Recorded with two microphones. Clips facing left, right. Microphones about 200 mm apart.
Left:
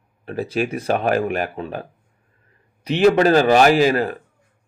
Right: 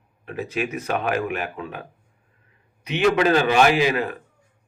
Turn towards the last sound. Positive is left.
turn(degrees=35)  # may be behind; listen again after turning